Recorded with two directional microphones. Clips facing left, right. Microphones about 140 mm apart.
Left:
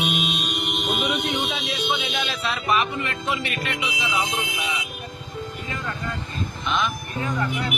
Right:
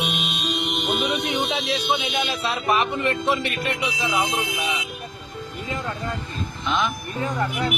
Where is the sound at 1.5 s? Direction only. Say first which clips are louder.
Right 3 dB; 30° right (ahead or behind).